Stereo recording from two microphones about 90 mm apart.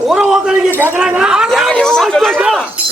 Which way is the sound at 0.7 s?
25° right (ahead or behind).